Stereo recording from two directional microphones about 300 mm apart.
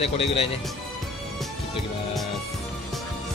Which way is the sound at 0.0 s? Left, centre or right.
Centre.